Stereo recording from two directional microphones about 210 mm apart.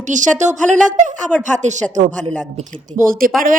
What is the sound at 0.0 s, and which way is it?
A woman's voice, 35° right (ahead or behind).